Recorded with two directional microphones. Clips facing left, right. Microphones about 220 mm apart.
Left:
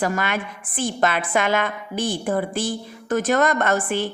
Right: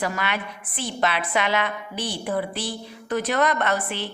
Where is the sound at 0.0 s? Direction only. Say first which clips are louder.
Left 4 dB; 50° left (ahead or behind).